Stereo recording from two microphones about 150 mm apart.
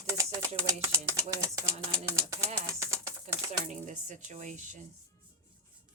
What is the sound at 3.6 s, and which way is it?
Speech, 55° right (ahead or behind).